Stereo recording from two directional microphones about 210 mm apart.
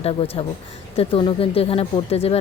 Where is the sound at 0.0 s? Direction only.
30° left (ahead or behind).